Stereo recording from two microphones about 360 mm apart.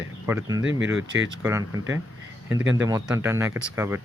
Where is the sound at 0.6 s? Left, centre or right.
Right.